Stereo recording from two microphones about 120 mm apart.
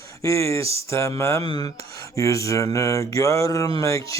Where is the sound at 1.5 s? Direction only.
35° left (ahead or behind).